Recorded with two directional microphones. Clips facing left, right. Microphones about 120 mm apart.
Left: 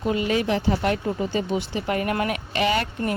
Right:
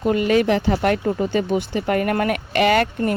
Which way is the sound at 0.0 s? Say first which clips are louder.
Right 5 dB; 55° right (ahead or behind).